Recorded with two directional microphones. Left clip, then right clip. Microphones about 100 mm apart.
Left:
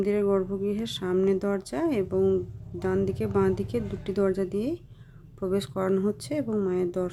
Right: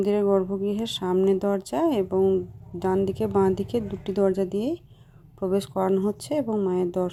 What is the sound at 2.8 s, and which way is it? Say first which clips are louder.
Speech: right 3 dB; 25° right (ahead or behind).